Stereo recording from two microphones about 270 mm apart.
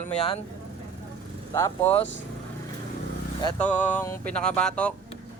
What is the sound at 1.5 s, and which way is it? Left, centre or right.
Speech, centre.